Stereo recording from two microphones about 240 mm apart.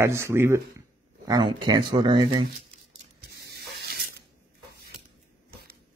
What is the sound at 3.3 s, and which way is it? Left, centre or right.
Spray, right.